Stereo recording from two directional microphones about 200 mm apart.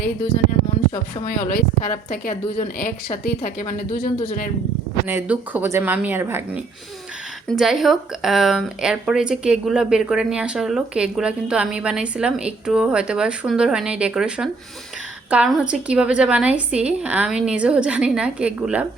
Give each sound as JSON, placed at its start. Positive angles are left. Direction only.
{"t": 1.2, "sound": "a woman's voice", "side_deg": 45}
{"t": 5.0, "sound": "speech", "side_deg": -10}
{"t": 7.4, "sound": "speech", "side_deg": 0}